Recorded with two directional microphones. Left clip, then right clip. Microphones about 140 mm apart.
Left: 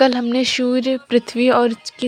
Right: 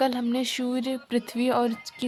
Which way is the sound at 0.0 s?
35° left (ahead or behind).